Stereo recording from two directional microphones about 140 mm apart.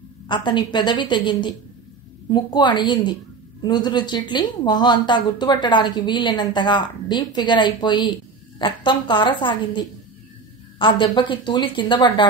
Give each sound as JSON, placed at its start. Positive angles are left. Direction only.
{"t": 0.3, "sound": "a woman's voice", "side_deg": 35}